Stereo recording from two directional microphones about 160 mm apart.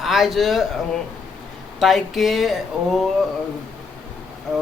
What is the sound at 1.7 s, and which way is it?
Speech, centre (ahead or behind).